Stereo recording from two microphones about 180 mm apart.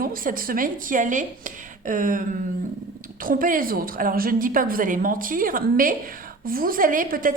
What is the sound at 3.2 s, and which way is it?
A woman's voice, 50° right (ahead or behind).